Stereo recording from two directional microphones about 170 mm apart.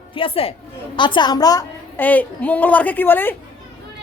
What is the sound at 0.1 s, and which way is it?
A woman's voice, 30° left (ahead or behind).